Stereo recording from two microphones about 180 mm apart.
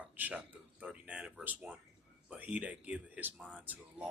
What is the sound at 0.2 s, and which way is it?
A man's voice, 10° right (ahead or behind).